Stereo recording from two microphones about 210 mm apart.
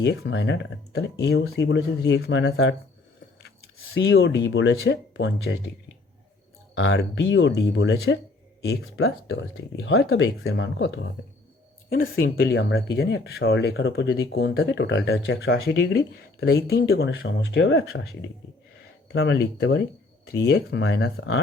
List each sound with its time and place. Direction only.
0.0 s speech: 55° left (ahead or behind)
3.9 s speech: 60° left (ahead or behind)
6.7 s speech: 60° left (ahead or behind)
9.0 s speech: 75° left (ahead or behind)
12.5 s speech: 60° left (ahead or behind)
16.4 s speech: 50° left (ahead or behind)
19.1 s speech: 55° left (ahead or behind)